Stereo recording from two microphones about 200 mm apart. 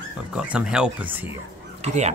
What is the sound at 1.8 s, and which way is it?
Speech, 35° right (ahead or behind).